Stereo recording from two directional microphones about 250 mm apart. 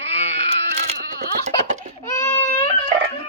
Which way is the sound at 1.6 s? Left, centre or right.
Right.